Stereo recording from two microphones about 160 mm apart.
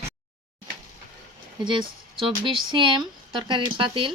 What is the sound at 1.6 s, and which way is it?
Speech, 30° right (ahead or behind).